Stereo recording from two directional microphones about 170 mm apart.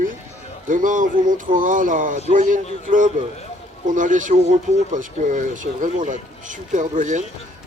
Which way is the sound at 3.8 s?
50° right (ahead or behind).